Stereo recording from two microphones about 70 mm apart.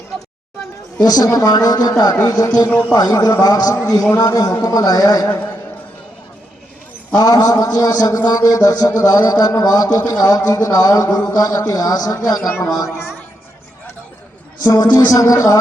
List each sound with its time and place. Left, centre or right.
1.0 s speech: left
2.2 s speech: left
2.6 s a man's voice: left
2.9 s speech: left
5.3 s a man's voice: left
7.2 s speech: left
14.6 s speech: left